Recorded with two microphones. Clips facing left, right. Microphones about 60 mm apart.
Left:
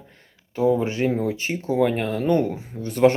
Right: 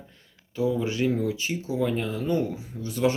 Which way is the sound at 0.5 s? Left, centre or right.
Left.